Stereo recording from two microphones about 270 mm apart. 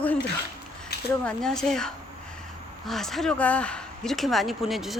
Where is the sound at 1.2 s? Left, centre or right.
Centre.